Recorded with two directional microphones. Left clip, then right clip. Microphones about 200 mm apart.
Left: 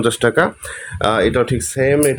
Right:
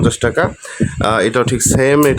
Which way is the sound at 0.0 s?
5° left (ahead or behind).